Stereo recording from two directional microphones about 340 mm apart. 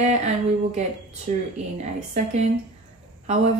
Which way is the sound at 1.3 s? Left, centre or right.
Right.